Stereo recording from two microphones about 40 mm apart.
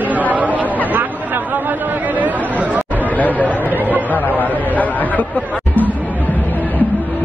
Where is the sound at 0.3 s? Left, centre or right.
Right.